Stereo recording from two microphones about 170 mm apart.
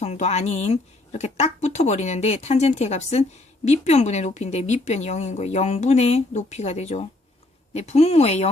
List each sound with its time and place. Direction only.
0.0 s speech: 40° left (ahead or behind)